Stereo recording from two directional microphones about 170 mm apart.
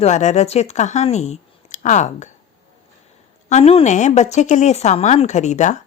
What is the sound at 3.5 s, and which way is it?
A woman's voice, 35° left (ahead or behind).